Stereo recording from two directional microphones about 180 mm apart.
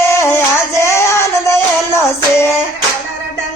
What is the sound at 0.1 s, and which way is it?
Music, 15° left (ahead or behind).